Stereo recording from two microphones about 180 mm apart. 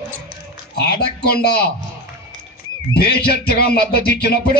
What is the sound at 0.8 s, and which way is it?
Speech, 60° left (ahead or behind).